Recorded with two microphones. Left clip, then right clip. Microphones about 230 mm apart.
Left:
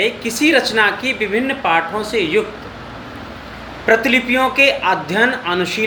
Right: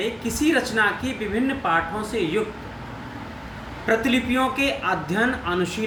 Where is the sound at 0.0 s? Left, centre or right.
Right.